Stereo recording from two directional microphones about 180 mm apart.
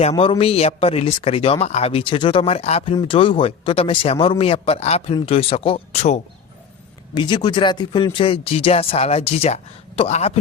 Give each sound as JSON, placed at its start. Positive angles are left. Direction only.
{"t": 0.1, "sound": "speech", "side_deg": 30}
{"t": 7.1, "sound": "speech", "side_deg": 25}